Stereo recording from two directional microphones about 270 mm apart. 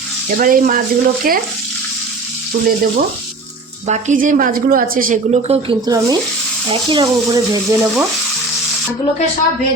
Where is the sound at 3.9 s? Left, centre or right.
Right.